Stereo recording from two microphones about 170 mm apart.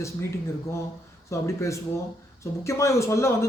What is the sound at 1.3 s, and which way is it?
Speech, 15° left (ahead or behind).